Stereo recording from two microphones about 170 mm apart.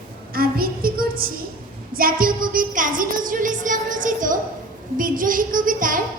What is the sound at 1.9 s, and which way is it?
A woman's voice, 60° right (ahead or behind).